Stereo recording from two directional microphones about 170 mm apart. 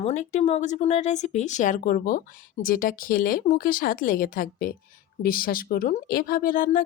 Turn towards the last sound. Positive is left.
turn(degrees=55)  # may be behind; listen again after turning